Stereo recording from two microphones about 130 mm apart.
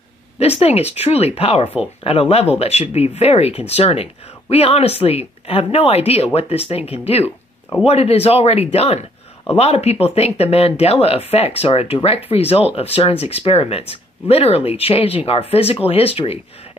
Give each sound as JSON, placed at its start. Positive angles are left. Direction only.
{"t": 0.4, "sound": "speech", "side_deg": 50}